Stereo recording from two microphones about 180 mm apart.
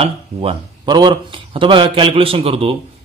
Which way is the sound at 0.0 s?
30° right (ahead or behind).